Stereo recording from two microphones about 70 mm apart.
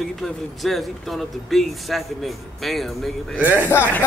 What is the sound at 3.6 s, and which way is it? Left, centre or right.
Speech, left.